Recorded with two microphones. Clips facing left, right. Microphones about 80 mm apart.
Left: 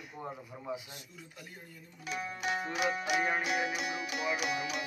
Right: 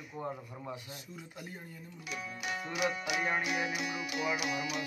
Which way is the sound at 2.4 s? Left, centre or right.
Left.